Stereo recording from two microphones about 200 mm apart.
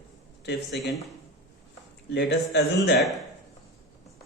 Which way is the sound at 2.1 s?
60° left (ahead or behind).